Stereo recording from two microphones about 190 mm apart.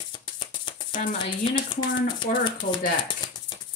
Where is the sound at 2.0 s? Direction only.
25° left (ahead or behind).